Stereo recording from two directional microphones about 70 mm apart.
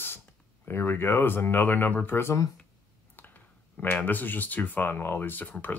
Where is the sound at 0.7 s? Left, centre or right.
Left.